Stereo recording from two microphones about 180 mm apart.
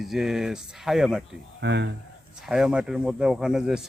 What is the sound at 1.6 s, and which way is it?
Speech, 75° right (ahead or behind).